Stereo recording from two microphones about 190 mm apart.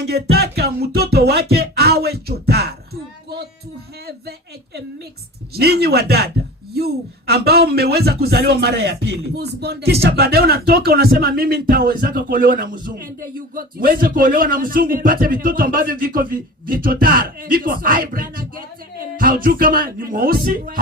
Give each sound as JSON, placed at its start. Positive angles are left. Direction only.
{"t": 0.0, "sound": "music", "side_deg": -55}
{"t": 4.0, "sound": "a sound", "side_deg": -55}
{"t": 5.5, "sound": "a man's voice", "side_deg": -55}